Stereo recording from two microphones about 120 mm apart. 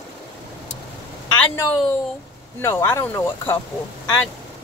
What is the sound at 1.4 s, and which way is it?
Speech, 20° left (ahead or behind).